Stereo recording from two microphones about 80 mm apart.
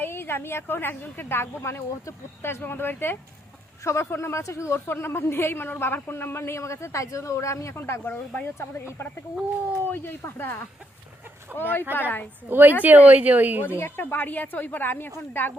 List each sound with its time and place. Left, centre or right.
0.0 s a woman's voice: left
11.5 s a woman's voice: left
12.5 s speech: right
13.7 s a woman's voice: left